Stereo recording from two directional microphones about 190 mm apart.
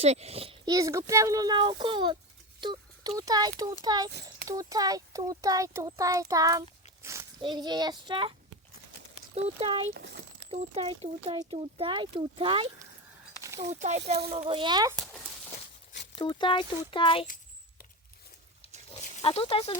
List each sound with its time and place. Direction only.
0.0 s speech: 35° right (ahead or behind)
9.3 s speech: 30° right (ahead or behind)
9.9 s speech: 60° right (ahead or behind)
10.4 s speech: 30° right (ahead or behind)
16.1 s speech: 25° left (ahead or behind)
17.2 s a sound: 45° left (ahead or behind)
18.9 s snake: 30° left (ahead or behind)